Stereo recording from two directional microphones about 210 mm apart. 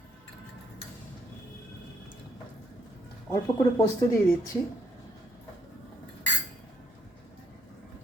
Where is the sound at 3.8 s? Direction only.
15° left (ahead or behind).